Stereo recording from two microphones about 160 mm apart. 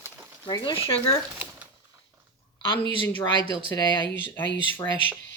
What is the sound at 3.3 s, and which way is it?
Speech, 30° left (ahead or behind).